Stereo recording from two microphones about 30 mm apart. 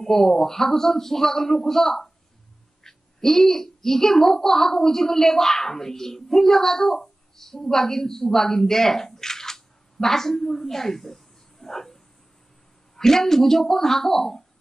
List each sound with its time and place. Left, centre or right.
0.0 s a child's voice: centre